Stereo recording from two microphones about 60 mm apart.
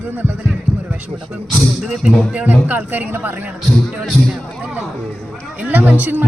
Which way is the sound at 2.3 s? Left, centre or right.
Right.